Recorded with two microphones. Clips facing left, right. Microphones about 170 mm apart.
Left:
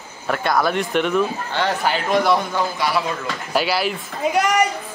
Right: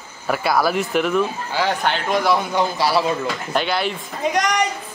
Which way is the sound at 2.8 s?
30° right (ahead or behind).